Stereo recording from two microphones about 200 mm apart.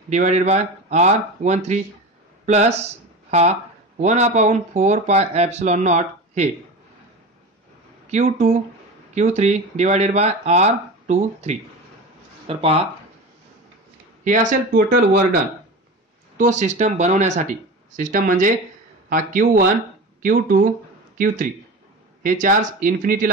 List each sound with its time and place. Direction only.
0.1 s speech: 35° right (ahead or behind)
8.1 s speech: 35° right (ahead or behind)
14.2 s speech: 40° right (ahead or behind)
16.3 s speech: 35° right (ahead or behind)
22.2 s speech: 40° right (ahead or behind)